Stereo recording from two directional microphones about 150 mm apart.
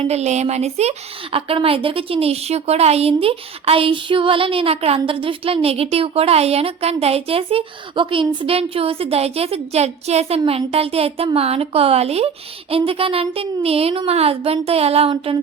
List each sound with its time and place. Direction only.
0.0 s a woman's voice: 45° right (ahead or behind)